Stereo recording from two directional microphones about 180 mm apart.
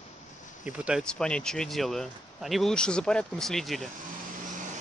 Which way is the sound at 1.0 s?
5° left (ahead or behind).